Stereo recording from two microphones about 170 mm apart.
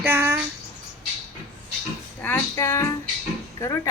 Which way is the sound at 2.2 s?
15° left (ahead or behind).